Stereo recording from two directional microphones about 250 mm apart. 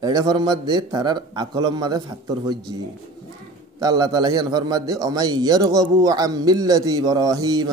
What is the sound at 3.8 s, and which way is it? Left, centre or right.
A man's voice, centre.